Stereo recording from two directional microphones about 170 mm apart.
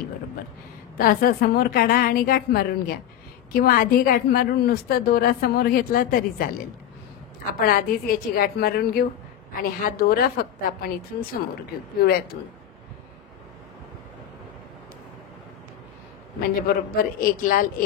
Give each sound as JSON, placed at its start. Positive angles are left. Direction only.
{"t": 0.9, "sound": "a woman's voice", "side_deg": 60}
{"t": 7.5, "sound": "a woman's voice", "side_deg": 60}
{"t": 16.3, "sound": "a woman's voice", "side_deg": 60}